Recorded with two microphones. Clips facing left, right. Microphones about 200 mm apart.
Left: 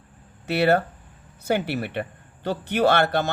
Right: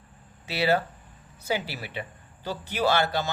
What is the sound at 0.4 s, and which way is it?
A man's voice, 55° left (ahead or behind).